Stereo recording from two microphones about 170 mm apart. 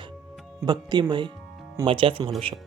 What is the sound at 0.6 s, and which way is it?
Speech, 25° right (ahead or behind).